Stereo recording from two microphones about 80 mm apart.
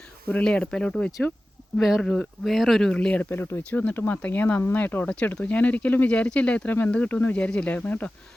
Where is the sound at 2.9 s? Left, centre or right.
Centre.